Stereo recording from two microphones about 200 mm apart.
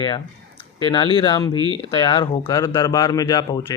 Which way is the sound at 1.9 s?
20° left (ahead or behind).